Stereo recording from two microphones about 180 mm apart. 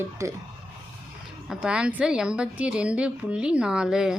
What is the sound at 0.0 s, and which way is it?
Speech, 15° right (ahead or behind).